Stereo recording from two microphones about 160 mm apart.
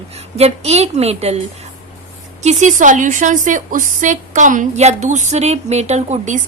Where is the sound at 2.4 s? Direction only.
50° right (ahead or behind).